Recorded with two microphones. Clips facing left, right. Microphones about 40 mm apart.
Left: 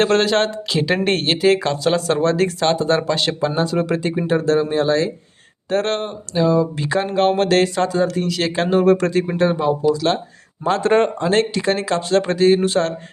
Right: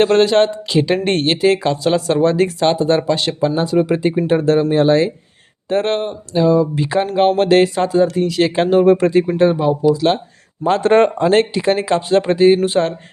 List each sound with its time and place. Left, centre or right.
0.0 s speech: centre
4.3 s speech: right
5.6 s speech: centre
10.7 s speech: right
11.3 s speech: centre